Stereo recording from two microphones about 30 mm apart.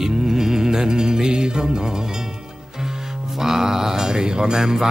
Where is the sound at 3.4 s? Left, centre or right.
Centre.